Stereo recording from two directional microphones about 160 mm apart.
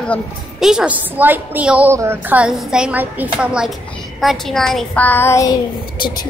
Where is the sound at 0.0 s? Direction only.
Centre (ahead or behind).